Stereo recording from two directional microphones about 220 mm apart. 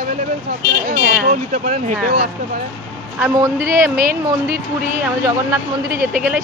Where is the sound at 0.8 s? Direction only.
35° right (ahead or behind).